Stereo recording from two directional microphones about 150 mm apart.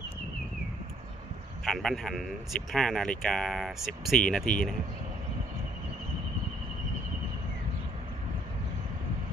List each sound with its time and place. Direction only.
1.6 s speech: centre (ahead or behind)